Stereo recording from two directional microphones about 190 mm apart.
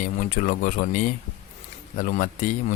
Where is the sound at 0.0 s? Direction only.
45° left (ahead or behind).